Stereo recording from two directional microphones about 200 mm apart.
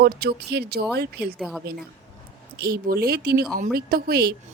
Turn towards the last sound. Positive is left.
turn(degrees=-50)  # may be behind; listen again after turning